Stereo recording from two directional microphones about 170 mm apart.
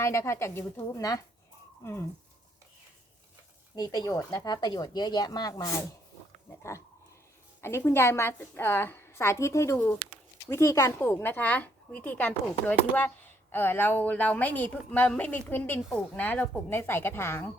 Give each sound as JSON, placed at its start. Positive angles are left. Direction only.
{"t": 0.0, "sound": "a woman's voice", "side_deg": 15}
{"t": 3.8, "sound": "a woman's voice", "side_deg": 25}